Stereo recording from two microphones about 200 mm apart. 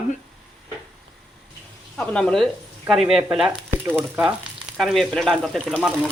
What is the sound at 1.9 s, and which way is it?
Speech, 5° left (ahead or behind).